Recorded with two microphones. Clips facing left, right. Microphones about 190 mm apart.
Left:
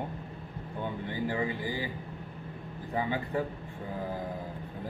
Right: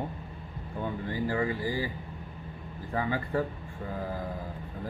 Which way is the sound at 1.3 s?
20° left (ahead or behind).